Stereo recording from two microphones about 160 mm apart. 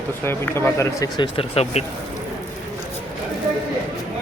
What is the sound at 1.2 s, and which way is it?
Speech, 35° left (ahead or behind).